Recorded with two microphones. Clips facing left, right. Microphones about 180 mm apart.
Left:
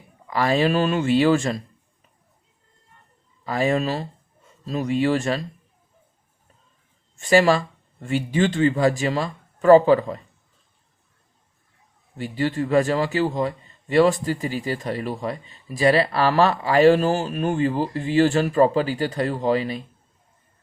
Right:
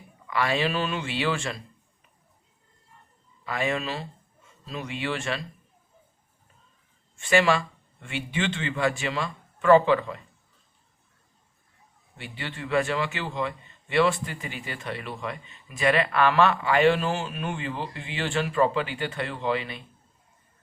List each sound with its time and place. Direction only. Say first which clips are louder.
0.3 s a man's voice: left 6 dB; 40° left (ahead or behind)
3.4 s speech: left 7 dB; 40° left (ahead or behind)
7.2 s a man's voice: left 5 dB; 40° left (ahead or behind)
12.1 s a man's voice: left 13 dB; 40° left (ahead or behind)